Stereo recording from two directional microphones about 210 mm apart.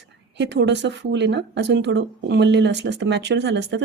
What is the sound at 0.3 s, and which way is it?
A woman's voice, 55° right (ahead or behind).